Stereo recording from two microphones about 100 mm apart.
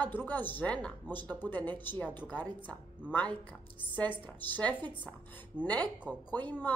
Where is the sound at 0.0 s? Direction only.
20° left (ahead or behind).